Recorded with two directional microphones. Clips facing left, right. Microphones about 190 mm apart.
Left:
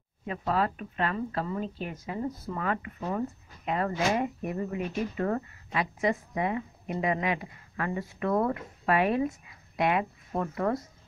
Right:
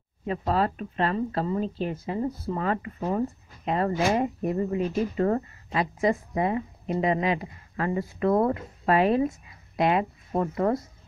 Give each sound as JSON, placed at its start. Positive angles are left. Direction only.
{"t": 0.3, "sound": "speech", "side_deg": -35}